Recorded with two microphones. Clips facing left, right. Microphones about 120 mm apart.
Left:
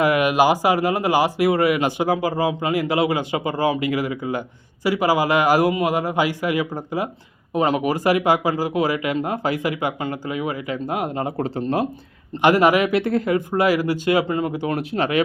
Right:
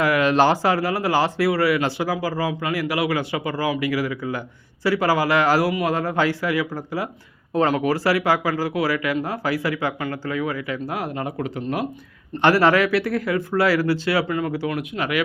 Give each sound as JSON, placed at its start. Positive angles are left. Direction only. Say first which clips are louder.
{"t": 0.0, "sound": "speech", "louder": "left 1 dB", "side_deg": 15}
{"t": 12.4, "sound": "speech", "louder": "left 1 dB", "side_deg": 15}